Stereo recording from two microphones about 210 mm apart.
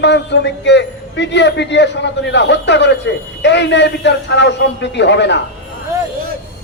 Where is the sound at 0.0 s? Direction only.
55° left (ahead or behind).